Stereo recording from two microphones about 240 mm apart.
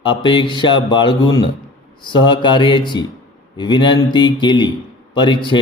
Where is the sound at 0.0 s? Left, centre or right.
Centre.